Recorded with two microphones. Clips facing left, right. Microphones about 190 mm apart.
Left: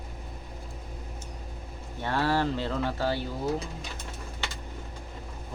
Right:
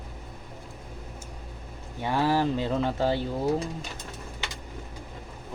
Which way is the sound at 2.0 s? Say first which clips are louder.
Right 2 dB; 15° right (ahead or behind).